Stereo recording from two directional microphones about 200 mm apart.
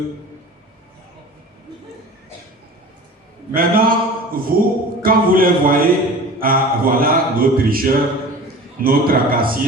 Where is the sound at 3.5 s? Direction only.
45° right (ahead or behind).